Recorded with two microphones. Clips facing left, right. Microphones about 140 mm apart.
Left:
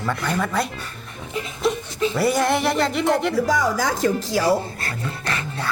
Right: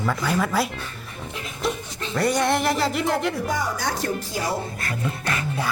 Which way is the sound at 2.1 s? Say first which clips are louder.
Even; 5° left (ahead or behind).